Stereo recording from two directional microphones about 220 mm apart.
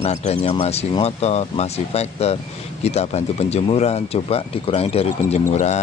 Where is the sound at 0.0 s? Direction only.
30° left (ahead or behind).